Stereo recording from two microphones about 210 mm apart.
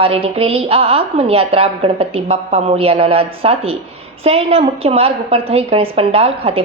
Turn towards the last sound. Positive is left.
turn(degrees=-25)  # may be behind; listen again after turning